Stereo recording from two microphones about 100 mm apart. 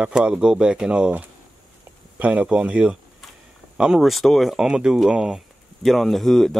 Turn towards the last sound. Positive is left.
turn(degrees=0)  # may be behind; listen again after turning